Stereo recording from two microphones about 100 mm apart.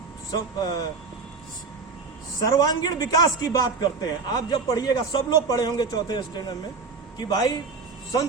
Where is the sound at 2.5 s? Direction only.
40° left (ahead or behind).